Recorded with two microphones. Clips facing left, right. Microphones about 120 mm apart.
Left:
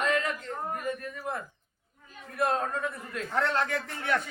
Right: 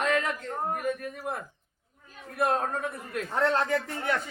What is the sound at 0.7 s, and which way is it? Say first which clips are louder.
Speech: right 3 dB; 75° right (ahead or behind).